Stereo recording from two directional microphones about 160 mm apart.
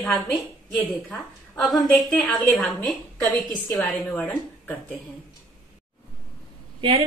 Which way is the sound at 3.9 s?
10° left (ahead or behind).